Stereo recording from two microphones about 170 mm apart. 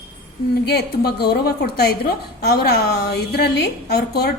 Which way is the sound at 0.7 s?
70° left (ahead or behind).